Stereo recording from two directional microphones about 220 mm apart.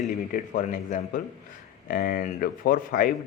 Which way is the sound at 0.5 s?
35° left (ahead or behind).